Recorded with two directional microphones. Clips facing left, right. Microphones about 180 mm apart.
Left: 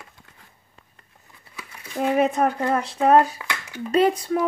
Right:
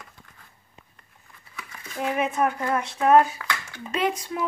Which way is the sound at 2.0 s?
35° left (ahead or behind).